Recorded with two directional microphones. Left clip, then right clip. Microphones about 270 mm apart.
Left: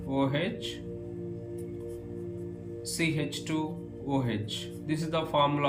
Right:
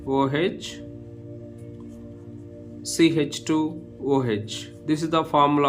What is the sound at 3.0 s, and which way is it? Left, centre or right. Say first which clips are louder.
Speech: right 11 dB; centre.